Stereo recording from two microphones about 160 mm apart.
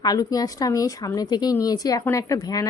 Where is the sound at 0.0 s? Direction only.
25° left (ahead or behind).